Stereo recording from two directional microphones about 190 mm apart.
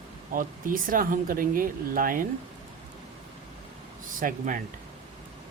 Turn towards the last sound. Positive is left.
turn(degrees=-45)  # may be behind; listen again after turning